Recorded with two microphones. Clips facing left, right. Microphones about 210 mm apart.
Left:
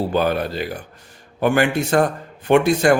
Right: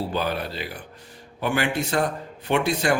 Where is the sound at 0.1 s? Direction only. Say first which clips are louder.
Left 7 dB; 50° left (ahead or behind).